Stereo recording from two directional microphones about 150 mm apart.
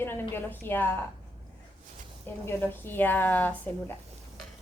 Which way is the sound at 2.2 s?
15° left (ahead or behind).